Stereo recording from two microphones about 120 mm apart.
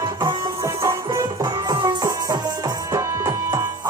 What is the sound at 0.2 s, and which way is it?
Music, 30° right (ahead or behind).